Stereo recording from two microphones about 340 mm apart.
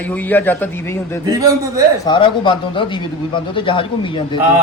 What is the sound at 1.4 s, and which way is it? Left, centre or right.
Speech, centre.